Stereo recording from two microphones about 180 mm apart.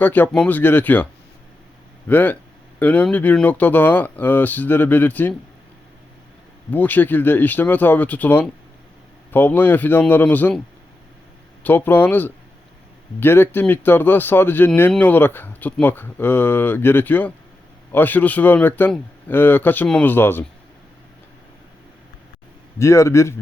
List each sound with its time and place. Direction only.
0.0 s speech: 10° left (ahead or behind)
2.0 s speech: 10° left (ahead or behind)
6.7 s speech: 10° left (ahead or behind)
11.6 s speech: 10° left (ahead or behind)
22.8 s speech: 15° left (ahead or behind)